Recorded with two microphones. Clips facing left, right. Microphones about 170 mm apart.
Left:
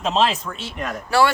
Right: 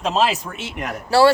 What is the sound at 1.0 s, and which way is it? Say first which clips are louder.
Speech: right 4 dB; 30° right (ahead or behind).